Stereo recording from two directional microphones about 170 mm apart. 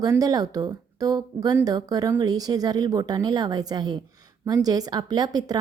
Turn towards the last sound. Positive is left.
turn(degrees=-25)  # may be behind; listen again after turning